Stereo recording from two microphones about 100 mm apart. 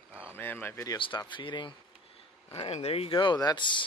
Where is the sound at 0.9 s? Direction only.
50° left (ahead or behind).